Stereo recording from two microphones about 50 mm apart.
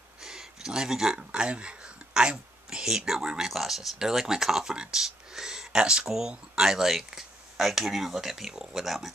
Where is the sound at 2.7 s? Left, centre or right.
Centre.